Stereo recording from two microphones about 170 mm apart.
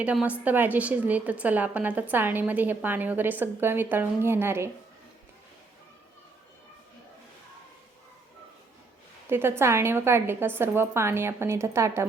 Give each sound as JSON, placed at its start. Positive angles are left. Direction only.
{"t": 0.0, "sound": "a woman's voice", "side_deg": -5}
{"t": 9.3, "sound": "a woman's voice", "side_deg": -15}